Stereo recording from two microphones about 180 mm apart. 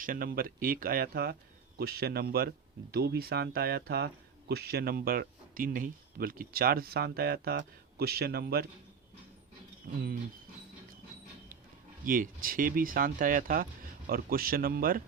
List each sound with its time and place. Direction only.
0.0 s speech: 50° right (ahead or behind)
12.0 s speech: 50° right (ahead or behind)